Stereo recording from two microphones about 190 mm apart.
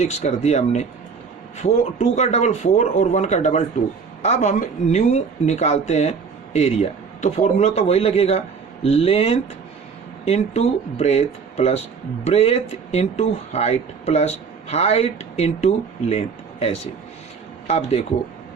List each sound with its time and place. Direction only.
0.0 s speech: 35° left (ahead or behind)